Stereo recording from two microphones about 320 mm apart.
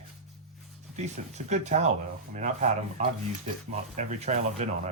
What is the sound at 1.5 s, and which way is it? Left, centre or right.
Speech, right.